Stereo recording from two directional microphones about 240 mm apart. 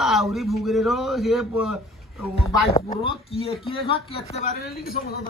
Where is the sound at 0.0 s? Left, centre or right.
Centre.